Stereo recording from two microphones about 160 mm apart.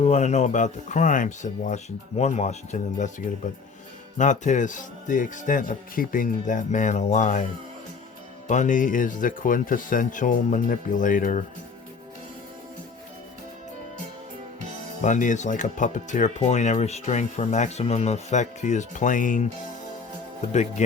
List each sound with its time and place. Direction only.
0.0 s speech: 45° left (ahead or behind)
4.2 s speech: 50° left (ahead or behind)
8.4 s speech: 50° left (ahead or behind)
15.0 s speech: 50° left (ahead or behind)
20.5 s speech: 45° left (ahead or behind)